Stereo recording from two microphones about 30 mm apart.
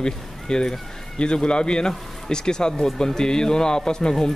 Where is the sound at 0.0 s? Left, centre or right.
Left.